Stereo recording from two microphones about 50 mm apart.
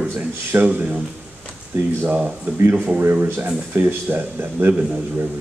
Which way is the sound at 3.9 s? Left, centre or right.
Right.